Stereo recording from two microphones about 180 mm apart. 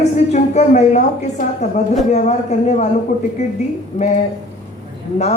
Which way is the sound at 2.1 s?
40° left (ahead or behind).